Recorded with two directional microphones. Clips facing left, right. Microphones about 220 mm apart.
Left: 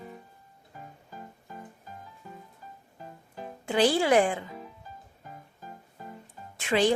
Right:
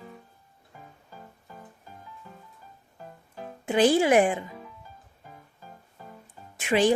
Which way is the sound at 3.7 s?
20° right (ahead or behind).